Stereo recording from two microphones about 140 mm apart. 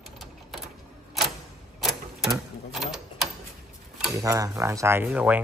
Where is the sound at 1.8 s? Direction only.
Centre (ahead or behind).